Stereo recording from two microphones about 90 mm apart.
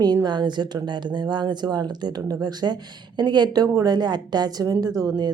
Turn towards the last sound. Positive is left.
turn(degrees=-45)  # may be behind; listen again after turning